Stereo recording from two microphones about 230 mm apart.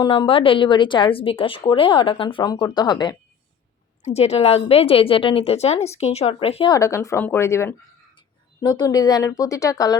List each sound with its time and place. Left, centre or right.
0.0 s a woman's voice: left